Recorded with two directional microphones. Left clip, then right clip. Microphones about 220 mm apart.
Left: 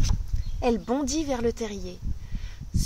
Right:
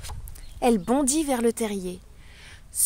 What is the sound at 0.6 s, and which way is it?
Speech, 50° right (ahead or behind).